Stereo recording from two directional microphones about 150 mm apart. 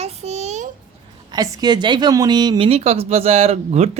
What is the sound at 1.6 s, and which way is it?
Speech, 30° right (ahead or behind).